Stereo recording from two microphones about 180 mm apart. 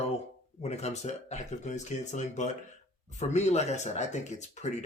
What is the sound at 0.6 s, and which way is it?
Speech, 35° left (ahead or behind).